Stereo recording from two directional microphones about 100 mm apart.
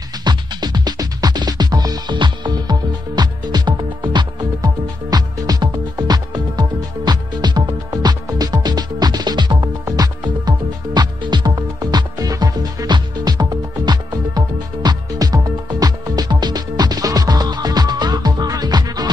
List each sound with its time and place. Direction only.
0.2 s music: 45° right (ahead or behind)